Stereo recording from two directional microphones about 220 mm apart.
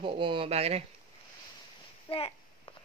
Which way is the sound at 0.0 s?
25° right (ahead or behind).